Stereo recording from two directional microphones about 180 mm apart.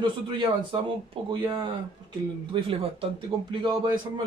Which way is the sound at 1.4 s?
25° right (ahead or behind).